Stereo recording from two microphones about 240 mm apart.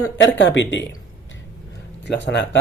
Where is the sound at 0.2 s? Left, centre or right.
Left.